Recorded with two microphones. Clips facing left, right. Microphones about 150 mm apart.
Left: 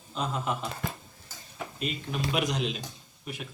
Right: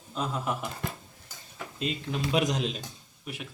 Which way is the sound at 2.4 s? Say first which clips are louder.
Right 3 dB; 40° right (ahead or behind).